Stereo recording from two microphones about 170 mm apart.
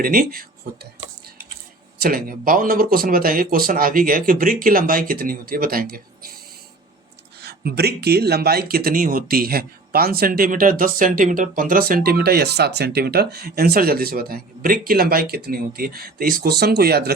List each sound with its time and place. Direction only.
0.0 s speech: 60° right (ahead or behind)
2.0 s speech: 60° right (ahead or behind)
7.4 s speech: 70° right (ahead or behind)